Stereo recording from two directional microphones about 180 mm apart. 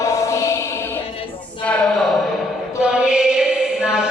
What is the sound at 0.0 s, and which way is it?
Mantra, 15° left (ahead or behind).